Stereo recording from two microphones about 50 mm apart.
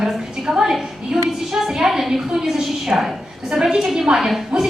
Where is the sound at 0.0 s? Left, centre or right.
Centre.